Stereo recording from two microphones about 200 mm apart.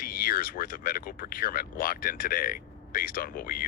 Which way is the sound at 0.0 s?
45° left (ahead or behind).